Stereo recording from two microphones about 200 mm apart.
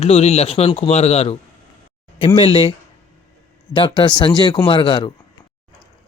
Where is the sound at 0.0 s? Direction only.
30° left (ahead or behind).